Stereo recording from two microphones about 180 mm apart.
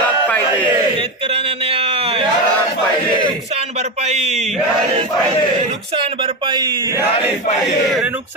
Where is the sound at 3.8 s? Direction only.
35° right (ahead or behind).